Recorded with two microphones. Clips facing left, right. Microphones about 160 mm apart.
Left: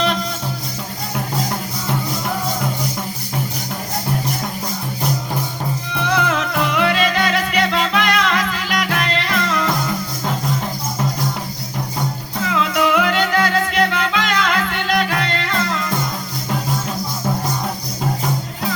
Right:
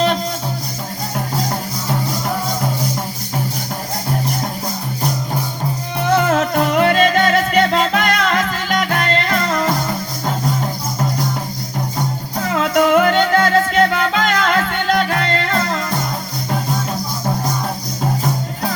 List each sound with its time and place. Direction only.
6.1 s music: 45° right (ahead or behind)
12.5 s music: 45° right (ahead or behind)